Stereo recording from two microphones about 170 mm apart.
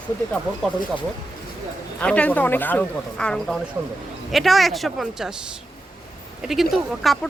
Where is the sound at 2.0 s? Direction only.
5° left (ahead or behind).